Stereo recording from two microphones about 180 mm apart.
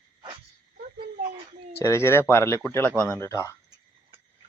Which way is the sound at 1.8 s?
15° left (ahead or behind).